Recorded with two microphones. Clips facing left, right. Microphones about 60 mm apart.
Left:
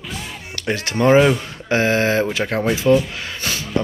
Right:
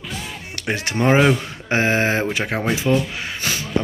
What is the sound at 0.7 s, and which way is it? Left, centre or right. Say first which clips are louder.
Speech: left 3 dB; right.